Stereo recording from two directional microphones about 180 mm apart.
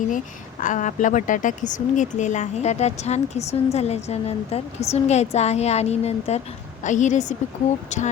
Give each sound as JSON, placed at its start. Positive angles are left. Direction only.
{"t": 0.6, "sound": "speech", "side_deg": 45}